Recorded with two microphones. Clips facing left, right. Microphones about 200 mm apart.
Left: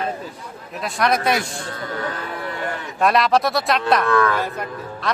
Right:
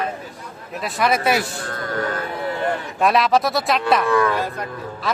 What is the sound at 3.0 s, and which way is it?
A man's voice, centre (ahead or behind).